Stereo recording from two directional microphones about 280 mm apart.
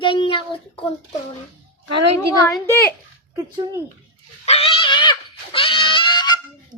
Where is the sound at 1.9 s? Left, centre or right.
Right.